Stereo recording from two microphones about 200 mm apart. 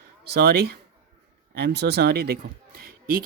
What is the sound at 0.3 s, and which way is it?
Speech, 55° right (ahead or behind).